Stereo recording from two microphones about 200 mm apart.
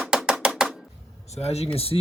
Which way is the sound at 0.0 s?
5° right (ahead or behind).